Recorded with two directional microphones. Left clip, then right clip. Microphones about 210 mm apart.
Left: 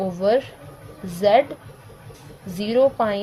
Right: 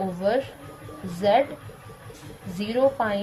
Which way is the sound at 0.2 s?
55° left (ahead or behind).